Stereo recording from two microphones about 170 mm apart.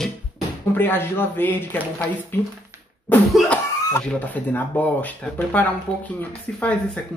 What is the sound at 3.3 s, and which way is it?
Speech, centre (ahead or behind).